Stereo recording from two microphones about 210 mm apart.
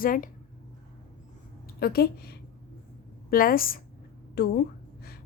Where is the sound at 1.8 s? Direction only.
50° left (ahead or behind).